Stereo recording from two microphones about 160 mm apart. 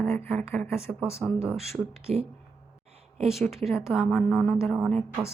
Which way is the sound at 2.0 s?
40° right (ahead or behind).